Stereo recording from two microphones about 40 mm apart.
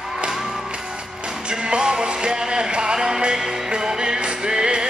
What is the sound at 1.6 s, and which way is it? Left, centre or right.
Music, right.